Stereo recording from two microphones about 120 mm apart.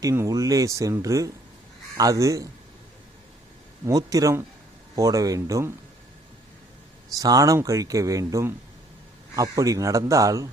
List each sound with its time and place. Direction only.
0.0 s speech: 25° right (ahead or behind)
3.8 s speech: 30° right (ahead or behind)
7.1 s speech: 30° right (ahead or behind)